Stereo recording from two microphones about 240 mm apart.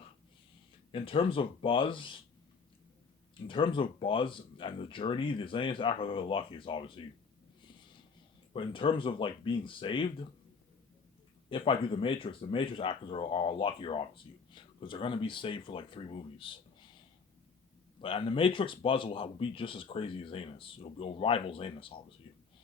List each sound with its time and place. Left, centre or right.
0.9 s speech: left
3.4 s speech: left
8.5 s speech: left
11.4 s speech: left
18.0 s speech: left
22.3 s a sound: left